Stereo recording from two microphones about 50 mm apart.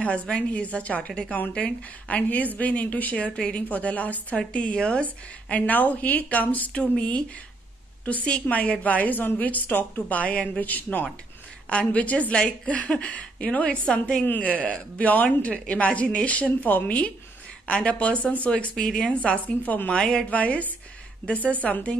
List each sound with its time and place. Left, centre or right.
0.0 s a woman's voice: left
3.3 s a woman's voice: centre
3.6 s a woman's voice: left
5.5 s speech: left
6.8 s a woman's voice: left
10.6 s a woman's voice: left
18.9 s a woman's voice: centre
19.4 s speech: left
19.9 s a woman's voice: centre
20.2 s a woman's voice: left